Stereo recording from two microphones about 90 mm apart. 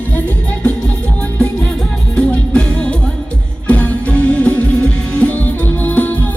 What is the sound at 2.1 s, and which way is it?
Music, 10° left (ahead or behind).